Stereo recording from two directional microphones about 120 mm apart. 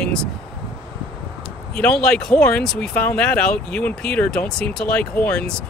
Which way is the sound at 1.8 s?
5° left (ahead or behind).